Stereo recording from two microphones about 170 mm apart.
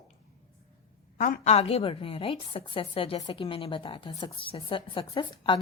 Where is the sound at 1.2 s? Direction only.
45° left (ahead or behind).